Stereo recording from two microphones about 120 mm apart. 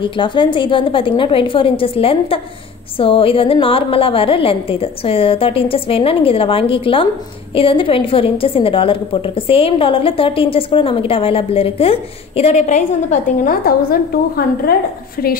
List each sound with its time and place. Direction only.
0.0 s a woman's voice: 45° left (ahead or behind); by 13.5 s 85° left